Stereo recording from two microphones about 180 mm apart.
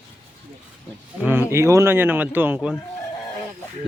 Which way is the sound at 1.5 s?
15° right (ahead or behind).